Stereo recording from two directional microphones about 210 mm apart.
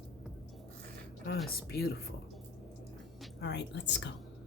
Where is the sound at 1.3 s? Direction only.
45° left (ahead or behind).